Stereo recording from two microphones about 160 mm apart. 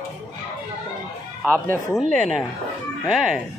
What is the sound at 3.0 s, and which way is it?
Speech, centre (ahead or behind).